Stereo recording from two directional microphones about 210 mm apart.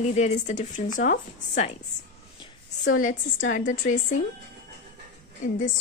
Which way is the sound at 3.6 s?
40° left (ahead or behind).